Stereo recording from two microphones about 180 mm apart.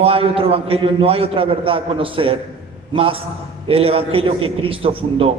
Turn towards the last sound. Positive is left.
turn(degrees=-30)  # may be behind; listen again after turning